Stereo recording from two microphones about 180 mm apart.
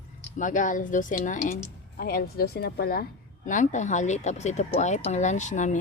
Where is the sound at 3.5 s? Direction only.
45° left (ahead or behind).